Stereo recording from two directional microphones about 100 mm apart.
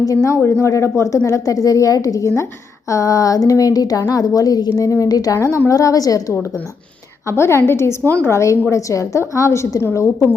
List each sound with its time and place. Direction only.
0.0 s a woman's voice: 35° left (ahead or behind)